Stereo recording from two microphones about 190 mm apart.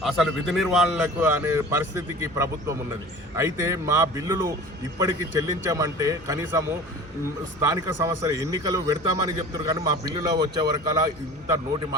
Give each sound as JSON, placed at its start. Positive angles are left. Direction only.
{"t": 0.0, "sound": "a man's voice", "side_deg": 0}